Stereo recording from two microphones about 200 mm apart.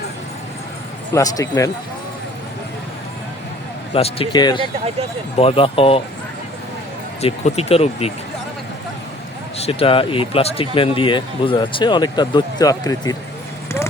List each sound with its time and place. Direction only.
1.1 s speech: 15° left (ahead or behind)
3.9 s speech: 30° left (ahead or behind)
7.2 s speech: 30° left (ahead or behind)
9.6 s speech: 30° left (ahead or behind)